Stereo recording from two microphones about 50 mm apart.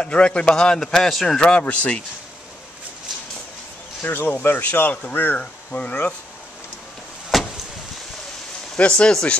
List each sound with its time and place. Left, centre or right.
0.0 s a man's voice: left
1.6 s speech: left
4.0 s speech: left
7.3 s vehicle: centre
8.7 s speech: left